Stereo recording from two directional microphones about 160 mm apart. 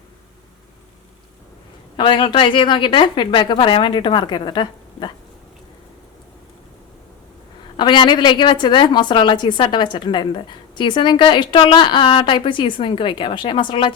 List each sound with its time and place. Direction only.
2.0 s a woman's voice: 30° left (ahead or behind)
7.8 s a woman's voice: 30° left (ahead or behind)